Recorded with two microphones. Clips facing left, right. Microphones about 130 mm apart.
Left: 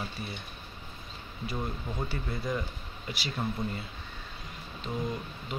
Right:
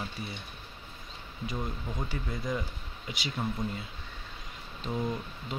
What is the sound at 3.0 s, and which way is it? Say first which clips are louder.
Speech: even; 20° right (ahead or behind).